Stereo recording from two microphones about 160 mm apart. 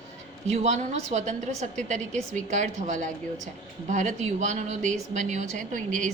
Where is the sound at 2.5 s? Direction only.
50° right (ahead or behind).